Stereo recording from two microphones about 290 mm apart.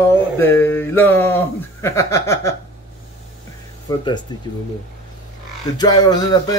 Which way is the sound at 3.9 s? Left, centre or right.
Centre.